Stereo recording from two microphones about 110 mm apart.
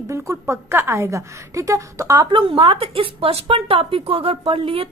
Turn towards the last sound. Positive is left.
turn(degrees=-55)  # may be behind; listen again after turning